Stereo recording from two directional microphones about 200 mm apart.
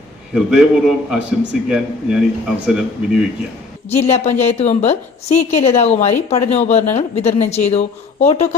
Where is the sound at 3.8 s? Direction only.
30° left (ahead or behind).